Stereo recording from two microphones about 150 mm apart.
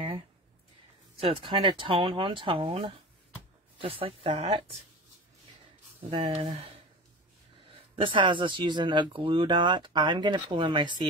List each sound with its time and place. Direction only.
1.2 s speech: 35° right (ahead or behind)
5.9 s speech: 40° right (ahead or behind)
7.9 s speech: 35° right (ahead or behind)